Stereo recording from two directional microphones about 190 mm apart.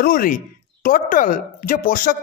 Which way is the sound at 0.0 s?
50° left (ahead or behind).